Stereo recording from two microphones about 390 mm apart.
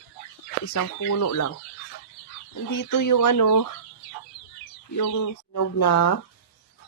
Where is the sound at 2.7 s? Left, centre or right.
Left.